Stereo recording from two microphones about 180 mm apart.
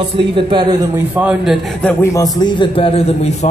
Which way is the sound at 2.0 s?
20° left (ahead or behind).